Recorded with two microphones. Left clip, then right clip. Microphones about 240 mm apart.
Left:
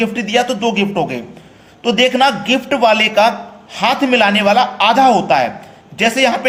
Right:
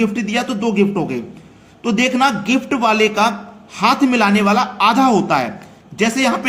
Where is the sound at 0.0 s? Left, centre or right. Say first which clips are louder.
Left 4 dB; centre.